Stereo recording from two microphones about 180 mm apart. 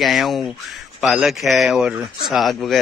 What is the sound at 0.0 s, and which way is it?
A man's voice, centre (ahead or behind).